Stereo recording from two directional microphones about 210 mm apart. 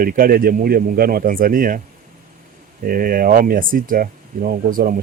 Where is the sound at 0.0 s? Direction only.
45° right (ahead or behind).